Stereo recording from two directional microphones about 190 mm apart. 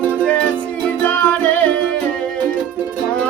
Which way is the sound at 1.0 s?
10° left (ahead or behind).